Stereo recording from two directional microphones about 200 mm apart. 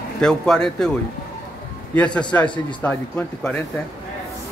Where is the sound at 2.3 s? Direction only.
10° left (ahead or behind).